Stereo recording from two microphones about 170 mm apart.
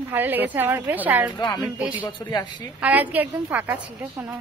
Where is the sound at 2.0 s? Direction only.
25° left (ahead or behind).